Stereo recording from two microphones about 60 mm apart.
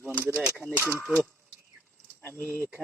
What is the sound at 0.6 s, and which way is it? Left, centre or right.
Speech, left.